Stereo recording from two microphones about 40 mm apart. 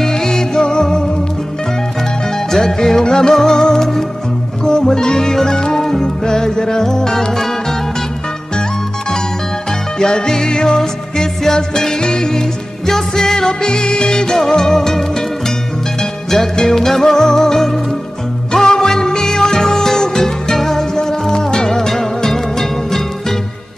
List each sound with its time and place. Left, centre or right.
0.0 s music: centre
2.3 s music: centre
9.9 s music: centre